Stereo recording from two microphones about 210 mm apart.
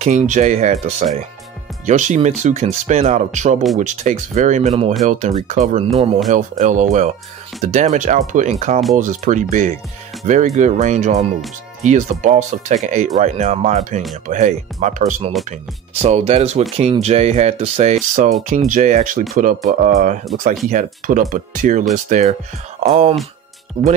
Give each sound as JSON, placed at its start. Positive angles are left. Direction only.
{"t": 0.0, "sound": "speech", "side_deg": -35}